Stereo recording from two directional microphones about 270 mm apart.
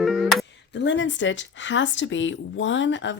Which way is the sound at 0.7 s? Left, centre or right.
Left.